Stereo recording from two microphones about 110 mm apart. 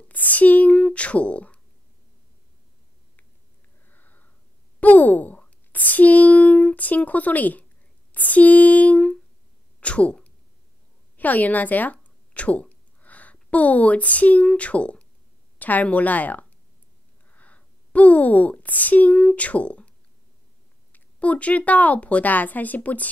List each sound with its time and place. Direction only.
0.1 s writing: 15° left (ahead or behind)
3.8 s sniff: 15° left (ahead or behind)
4.7 s speech: 15° left (ahead or behind)
8.1 s a sound: 15° left (ahead or behind)
11.1 s a woman's voice: 15° left (ahead or behind)
20.9 s a woman's voice: 15° left (ahead or behind)